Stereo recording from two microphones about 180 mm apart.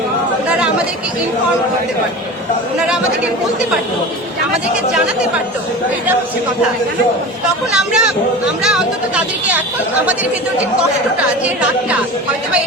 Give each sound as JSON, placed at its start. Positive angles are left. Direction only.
{"t": 7.7, "sound": "speech", "side_deg": -5}